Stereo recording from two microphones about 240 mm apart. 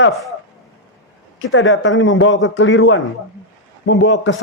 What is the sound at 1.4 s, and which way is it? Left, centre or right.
Speech, left.